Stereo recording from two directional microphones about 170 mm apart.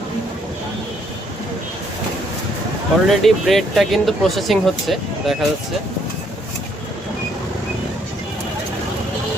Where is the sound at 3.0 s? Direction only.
Centre (ahead or behind).